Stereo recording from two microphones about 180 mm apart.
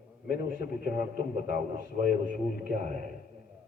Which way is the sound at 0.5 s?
50° right (ahead or behind).